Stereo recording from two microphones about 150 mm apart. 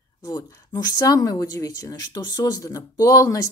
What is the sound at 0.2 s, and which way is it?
A woman's voice, 25° left (ahead or behind).